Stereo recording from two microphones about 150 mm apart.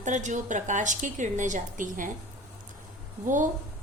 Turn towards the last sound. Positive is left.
turn(degrees=-60)  # may be behind; listen again after turning